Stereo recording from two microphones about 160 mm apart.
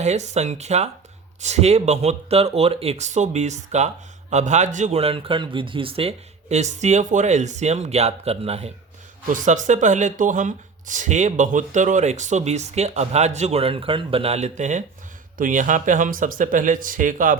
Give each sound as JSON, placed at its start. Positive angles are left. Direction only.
{"t": 0.0, "sound": "speech", "side_deg": -45}
{"t": 9.3, "sound": "speech", "side_deg": -50}